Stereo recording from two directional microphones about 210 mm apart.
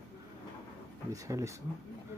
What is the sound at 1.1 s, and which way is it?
Speech, 15° right (ahead or behind).